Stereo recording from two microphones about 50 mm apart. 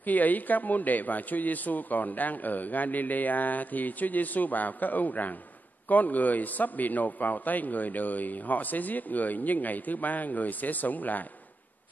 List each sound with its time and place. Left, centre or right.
0.0 s a man's voice: left